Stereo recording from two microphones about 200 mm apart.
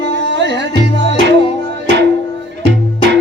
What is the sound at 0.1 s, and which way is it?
Music, 60° right (ahead or behind).